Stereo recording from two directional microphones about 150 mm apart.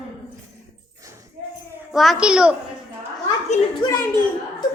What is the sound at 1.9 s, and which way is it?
Speech, centre (ahead or behind).